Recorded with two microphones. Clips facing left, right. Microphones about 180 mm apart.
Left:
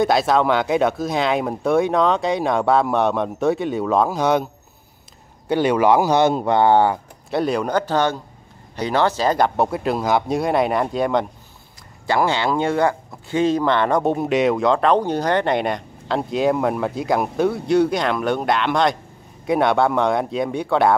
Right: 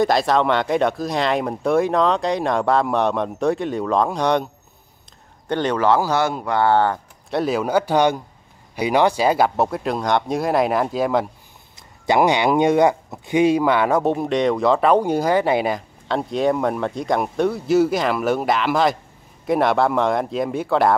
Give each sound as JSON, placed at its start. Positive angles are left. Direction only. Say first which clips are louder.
{"t": 0.0, "sound": "speech", "louder": "even", "side_deg": 0}
{"t": 5.5, "sound": "speech", "louder": "left 2 dB", "side_deg": 10}
{"t": 7.2, "sound": "a man's voice", "louder": "even", "side_deg": 0}
{"t": 12.1, "sound": "speech", "louder": "right 3 dB", "side_deg": -15}